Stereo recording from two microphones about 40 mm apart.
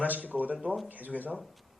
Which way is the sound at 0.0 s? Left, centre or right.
Right.